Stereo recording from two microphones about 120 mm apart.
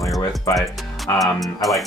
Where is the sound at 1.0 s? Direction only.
Centre (ahead or behind).